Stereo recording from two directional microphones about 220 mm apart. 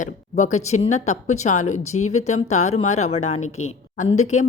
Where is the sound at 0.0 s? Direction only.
30° left (ahead or behind).